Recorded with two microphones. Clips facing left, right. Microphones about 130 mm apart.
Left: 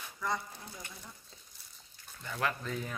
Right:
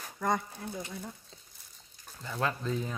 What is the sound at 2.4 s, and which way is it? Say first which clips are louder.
Speech: right 3 dB; 25° right (ahead or behind).